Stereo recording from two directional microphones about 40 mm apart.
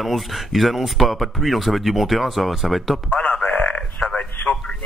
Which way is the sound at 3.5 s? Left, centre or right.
Left.